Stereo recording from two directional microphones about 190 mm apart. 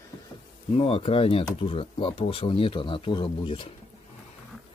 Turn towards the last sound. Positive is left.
turn(degrees=25)  # may be behind; listen again after turning